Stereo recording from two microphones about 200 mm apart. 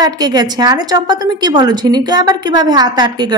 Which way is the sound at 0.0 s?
20° right (ahead or behind).